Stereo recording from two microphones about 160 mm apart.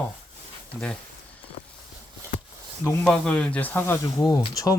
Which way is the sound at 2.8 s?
10° left (ahead or behind).